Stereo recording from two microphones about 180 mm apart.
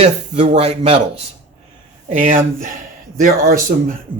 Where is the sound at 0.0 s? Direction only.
35° right (ahead or behind).